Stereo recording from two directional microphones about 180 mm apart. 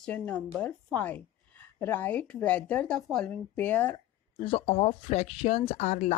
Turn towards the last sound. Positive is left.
turn(degrees=40)  # may be behind; listen again after turning